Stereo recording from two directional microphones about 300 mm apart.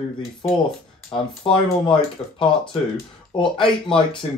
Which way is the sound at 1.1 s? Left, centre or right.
Centre.